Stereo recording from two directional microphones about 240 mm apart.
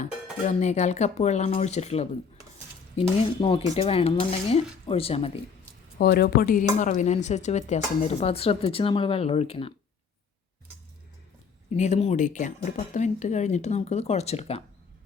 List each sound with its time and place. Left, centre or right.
0.0 s speech: left
6.0 s speech: left
11.7 s speech: left